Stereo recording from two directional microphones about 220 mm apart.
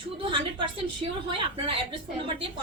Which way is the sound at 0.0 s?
25° right (ahead or behind).